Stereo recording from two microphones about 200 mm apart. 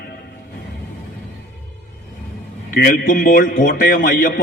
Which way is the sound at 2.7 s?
45° left (ahead or behind).